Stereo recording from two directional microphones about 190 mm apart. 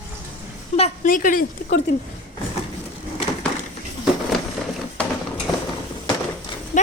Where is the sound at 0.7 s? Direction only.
30° left (ahead or behind).